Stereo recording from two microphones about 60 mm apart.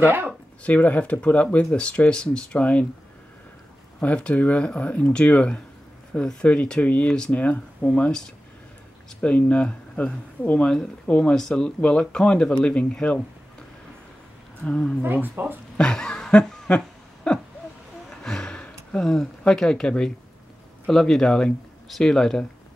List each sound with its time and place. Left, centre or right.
0.0 s speech: right
0.7 s speech: left
4.0 s speech: left
7.9 s speech: centre
14.6 s speech: centre
15.2 s speech: right
15.8 s speech: centre
16.6 s a sound: centre
20.9 s speech: centre